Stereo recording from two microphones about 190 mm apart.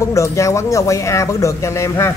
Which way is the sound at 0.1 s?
15° left (ahead or behind).